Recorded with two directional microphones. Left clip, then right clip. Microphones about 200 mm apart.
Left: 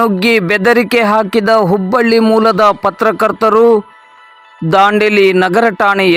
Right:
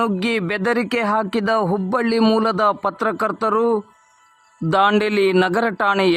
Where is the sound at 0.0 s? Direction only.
25° left (ahead or behind).